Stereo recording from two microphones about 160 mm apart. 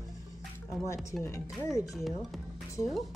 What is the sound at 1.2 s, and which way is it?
Music, 15° left (ahead or behind).